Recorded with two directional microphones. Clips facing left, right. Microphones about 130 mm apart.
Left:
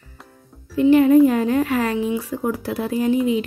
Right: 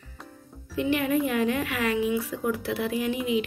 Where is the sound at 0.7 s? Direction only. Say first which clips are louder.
Left 12 dB; 35° left (ahead or behind).